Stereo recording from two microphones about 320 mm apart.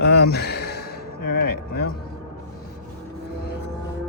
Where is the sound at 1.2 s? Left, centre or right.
Left.